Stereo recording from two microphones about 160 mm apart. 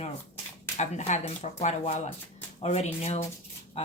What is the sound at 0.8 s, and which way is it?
Speech, 45° left (ahead or behind).